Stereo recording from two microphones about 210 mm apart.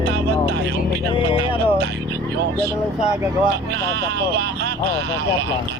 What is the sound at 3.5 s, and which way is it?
Speech, 50° right (ahead or behind).